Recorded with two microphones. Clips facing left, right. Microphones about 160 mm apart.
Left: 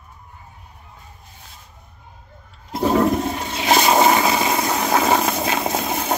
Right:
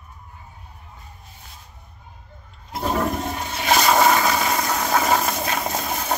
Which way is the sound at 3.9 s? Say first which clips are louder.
Left 1 dB; 20° left (ahead or behind).